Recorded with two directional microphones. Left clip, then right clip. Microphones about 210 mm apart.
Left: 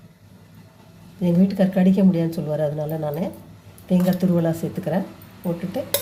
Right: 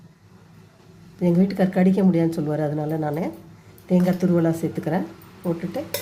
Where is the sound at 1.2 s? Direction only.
20° right (ahead or behind).